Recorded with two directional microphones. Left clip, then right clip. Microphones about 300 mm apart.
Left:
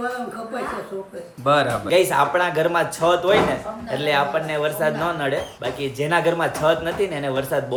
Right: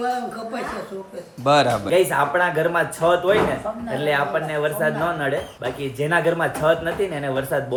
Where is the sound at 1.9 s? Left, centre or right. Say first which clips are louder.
Left 1 dB; centre.